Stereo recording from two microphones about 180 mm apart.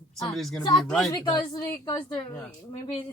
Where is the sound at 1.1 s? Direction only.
25° left (ahead or behind).